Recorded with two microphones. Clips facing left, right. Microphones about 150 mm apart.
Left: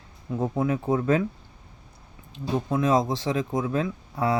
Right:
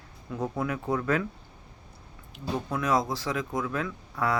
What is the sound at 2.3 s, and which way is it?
Speech, 25° left (ahead or behind).